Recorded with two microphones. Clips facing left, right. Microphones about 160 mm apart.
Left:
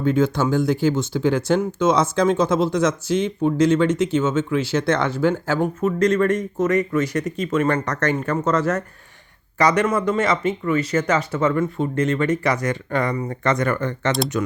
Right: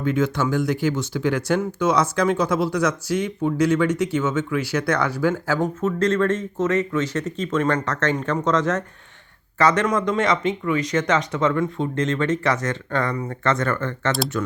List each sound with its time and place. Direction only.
0.0 s speech: 30° left (ahead or behind)